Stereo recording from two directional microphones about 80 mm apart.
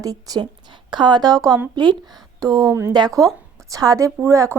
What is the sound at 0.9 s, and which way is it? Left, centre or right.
A woman's voice, right.